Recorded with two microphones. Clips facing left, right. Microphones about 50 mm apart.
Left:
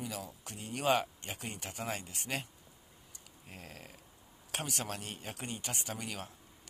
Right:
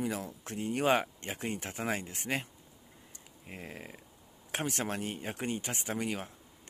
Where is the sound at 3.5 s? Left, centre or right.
Centre.